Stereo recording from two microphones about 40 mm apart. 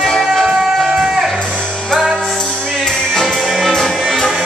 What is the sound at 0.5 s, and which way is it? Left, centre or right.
Music, centre.